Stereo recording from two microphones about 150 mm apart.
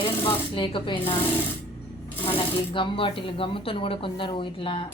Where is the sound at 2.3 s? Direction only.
35° left (ahead or behind).